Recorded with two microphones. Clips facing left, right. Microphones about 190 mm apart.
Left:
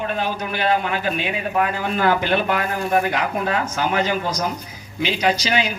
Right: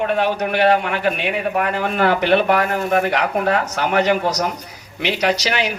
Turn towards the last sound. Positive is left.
turn(degrees=-70)  # may be behind; listen again after turning